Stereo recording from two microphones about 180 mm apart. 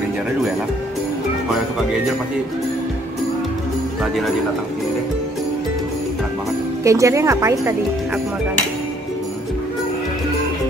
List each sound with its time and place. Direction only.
4.0 s speech: centre (ahead or behind)
6.8 s speech: 15° right (ahead or behind)